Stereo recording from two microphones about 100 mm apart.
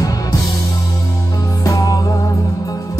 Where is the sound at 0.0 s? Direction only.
35° left (ahead or behind).